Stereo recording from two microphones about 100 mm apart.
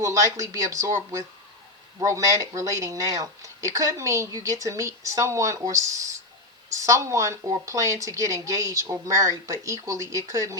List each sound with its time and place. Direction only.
0.0 s speech: 35° right (ahead or behind)